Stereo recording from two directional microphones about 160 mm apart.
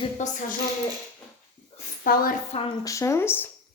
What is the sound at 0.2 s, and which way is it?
Speech, 50° left (ahead or behind).